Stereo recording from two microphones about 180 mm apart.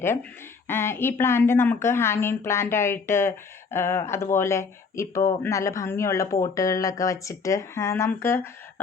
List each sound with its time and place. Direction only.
0.7 s a woman's voice: 15° left (ahead or behind)